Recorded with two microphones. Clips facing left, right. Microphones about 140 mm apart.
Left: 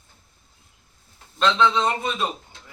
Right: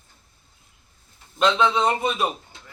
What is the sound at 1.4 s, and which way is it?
A man's voice, 15° right (ahead or behind).